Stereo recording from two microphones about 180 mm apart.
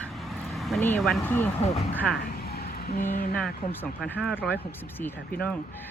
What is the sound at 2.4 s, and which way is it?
Music, 60° left (ahead or behind).